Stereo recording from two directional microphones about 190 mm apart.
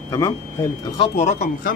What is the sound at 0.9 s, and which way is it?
Speech, 30° left (ahead or behind).